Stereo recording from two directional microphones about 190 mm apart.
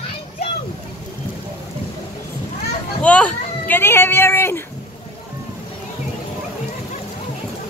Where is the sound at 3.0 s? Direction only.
5° left (ahead or behind).